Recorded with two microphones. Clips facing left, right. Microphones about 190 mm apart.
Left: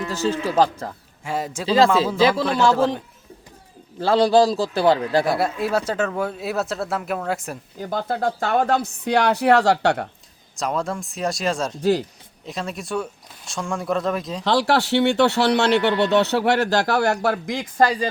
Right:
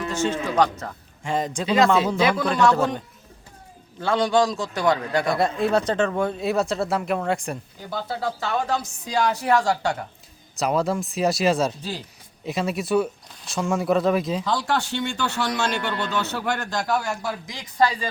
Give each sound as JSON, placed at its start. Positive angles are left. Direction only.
{"t": 0.1, "sound": "a man's voice", "side_deg": 35}
{"t": 1.2, "sound": "speech", "side_deg": 5}
{"t": 1.6, "sound": "speech", "side_deg": 30}
{"t": 2.3, "sound": "speech", "side_deg": 5}
{"t": 4.0, "sound": "a man's voice", "side_deg": 35}
{"t": 5.2, "sound": "speech", "side_deg": 5}
{"t": 7.8, "sound": "speech", "side_deg": 50}
{"t": 10.6, "sound": "speech", "side_deg": -5}
{"t": 14.4, "sound": "speech", "side_deg": 75}